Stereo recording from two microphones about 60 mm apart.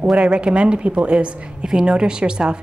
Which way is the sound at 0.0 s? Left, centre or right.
Centre.